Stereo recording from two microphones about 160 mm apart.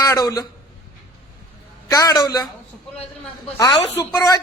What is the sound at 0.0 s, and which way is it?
Speech, 20° left (ahead or behind).